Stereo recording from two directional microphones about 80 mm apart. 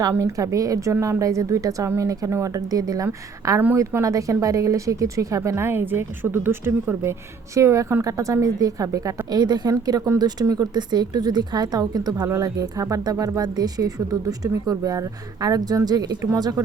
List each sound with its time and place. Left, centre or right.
0.2 s a woman's voice: right